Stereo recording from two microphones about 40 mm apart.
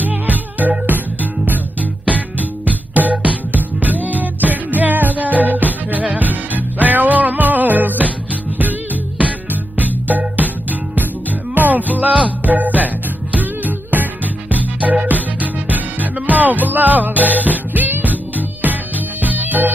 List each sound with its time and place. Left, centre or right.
0.0 s music: right
9.2 s music: right